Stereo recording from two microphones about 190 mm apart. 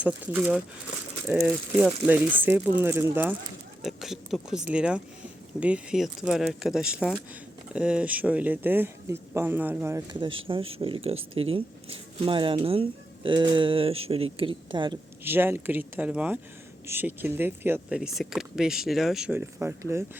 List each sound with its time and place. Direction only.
0.0 s speech: 10° right (ahead or behind)
10.2 s speech: 25° right (ahead or behind)
15.2 s speech: 10° right (ahead or behind)